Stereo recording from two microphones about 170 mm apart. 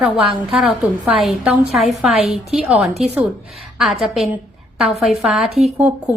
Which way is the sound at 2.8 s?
40° right (ahead or behind).